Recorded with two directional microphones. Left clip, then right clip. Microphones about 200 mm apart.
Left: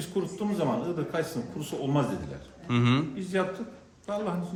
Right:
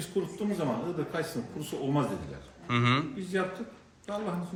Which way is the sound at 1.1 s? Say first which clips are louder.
Left 3 dB; centre (ahead or behind).